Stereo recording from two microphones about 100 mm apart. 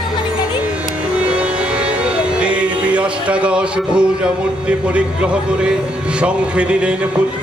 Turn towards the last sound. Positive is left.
turn(degrees=-10)  # may be behind; listen again after turning